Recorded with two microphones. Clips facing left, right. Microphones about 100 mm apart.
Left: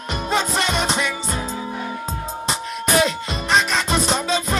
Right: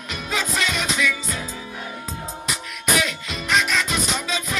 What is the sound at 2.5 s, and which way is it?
Music, 35° left (ahead or behind).